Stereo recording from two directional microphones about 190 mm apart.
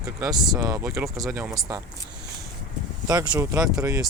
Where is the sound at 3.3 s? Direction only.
15° right (ahead or behind).